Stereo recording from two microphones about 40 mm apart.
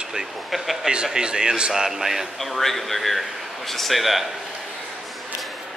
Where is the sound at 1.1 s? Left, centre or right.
Centre.